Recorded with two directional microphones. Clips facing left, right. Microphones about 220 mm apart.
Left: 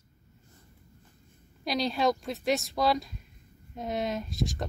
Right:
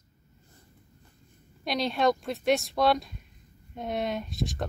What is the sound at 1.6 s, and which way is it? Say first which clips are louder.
A woman's voice: right 1 dB; centre (ahead or behind).